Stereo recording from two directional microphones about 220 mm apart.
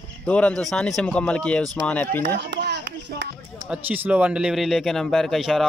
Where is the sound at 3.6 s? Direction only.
5° right (ahead or behind).